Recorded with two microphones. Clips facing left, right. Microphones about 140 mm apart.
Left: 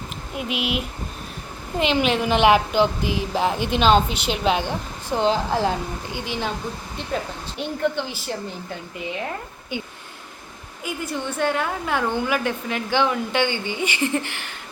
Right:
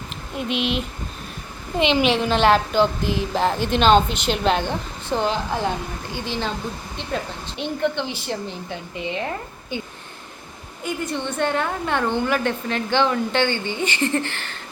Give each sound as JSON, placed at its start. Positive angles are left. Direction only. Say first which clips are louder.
{"t": 0.3, "sound": "a woman's voice", "louder": "right 2 dB", "side_deg": 5}
{"t": 2.2, "sound": "a woman's voice", "louder": "left 1 dB", "side_deg": 15}
{"t": 5.2, "sound": "speech", "louder": "left 5 dB", "side_deg": 35}
{"t": 6.1, "sound": "a woman's voice", "louder": "right 1 dB", "side_deg": 15}
{"t": 7.6, "sound": "a woman's voice", "louder": "right 1 dB", "side_deg": 5}